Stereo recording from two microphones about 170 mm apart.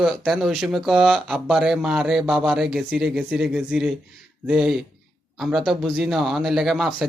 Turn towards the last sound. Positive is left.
turn(degrees=0)  # may be behind; listen again after turning